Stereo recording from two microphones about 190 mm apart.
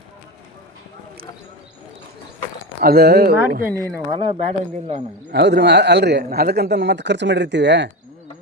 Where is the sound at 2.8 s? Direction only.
55° right (ahead or behind).